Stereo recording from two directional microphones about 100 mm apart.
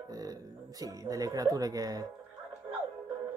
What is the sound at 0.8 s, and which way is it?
Speech, 35° right (ahead or behind).